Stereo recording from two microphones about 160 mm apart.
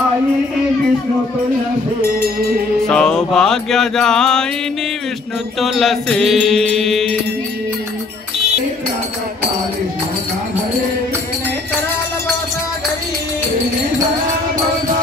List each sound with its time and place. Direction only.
2.0 s a sound: 70° right (ahead or behind)
2.9 s music: 5° left (ahead or behind)
5.6 s music: centre (ahead or behind)